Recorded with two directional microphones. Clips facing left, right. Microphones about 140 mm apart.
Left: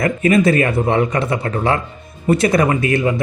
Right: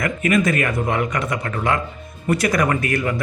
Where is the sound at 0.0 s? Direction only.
30° left (ahead or behind).